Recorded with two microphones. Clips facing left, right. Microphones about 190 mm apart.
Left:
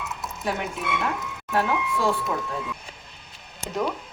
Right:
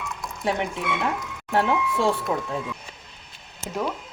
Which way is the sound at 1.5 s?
25° right (ahead or behind).